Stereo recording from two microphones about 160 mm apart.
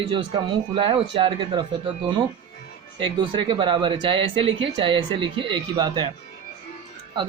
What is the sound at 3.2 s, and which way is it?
Speech, 30° right (ahead or behind).